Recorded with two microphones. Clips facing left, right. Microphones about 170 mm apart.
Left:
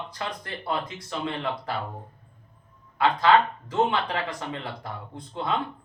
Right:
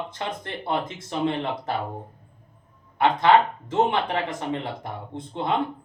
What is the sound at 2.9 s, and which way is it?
A man's voice, 20° right (ahead or behind).